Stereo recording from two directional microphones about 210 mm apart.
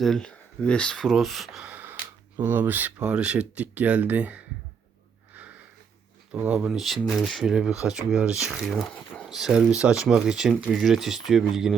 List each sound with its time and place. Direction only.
0.0 s speech: 5° left (ahead or behind)
6.3 s speech: 5° right (ahead or behind)